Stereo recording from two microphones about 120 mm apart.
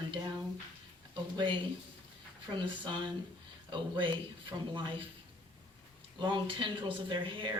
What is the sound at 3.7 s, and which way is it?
Speech, 40° right (ahead or behind).